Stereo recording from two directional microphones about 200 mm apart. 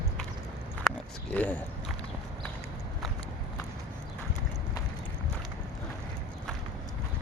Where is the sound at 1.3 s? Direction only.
10° left (ahead or behind).